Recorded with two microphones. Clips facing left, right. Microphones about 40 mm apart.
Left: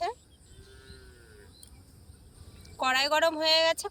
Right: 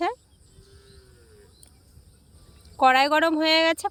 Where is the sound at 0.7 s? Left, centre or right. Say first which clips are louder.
Left 1 dB; left.